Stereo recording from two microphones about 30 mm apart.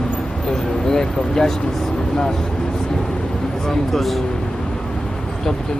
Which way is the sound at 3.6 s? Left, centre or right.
Centre.